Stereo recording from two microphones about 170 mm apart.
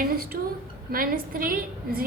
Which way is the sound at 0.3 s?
60° right (ahead or behind).